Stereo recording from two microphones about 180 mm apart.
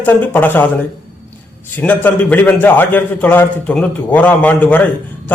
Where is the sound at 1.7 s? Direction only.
10° left (ahead or behind).